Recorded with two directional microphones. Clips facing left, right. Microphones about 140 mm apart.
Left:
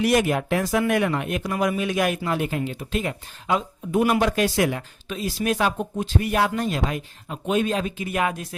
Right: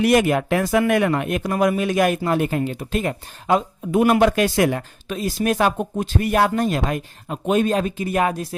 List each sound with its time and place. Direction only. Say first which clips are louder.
0.0 s speech: right 4 dB; 60° right (ahead or behind); by 3.6 s 45° right (ahead or behind)
3.9 s speech: right 4 dB; 55° right (ahead or behind); by 8.4 s 35° right (ahead or behind)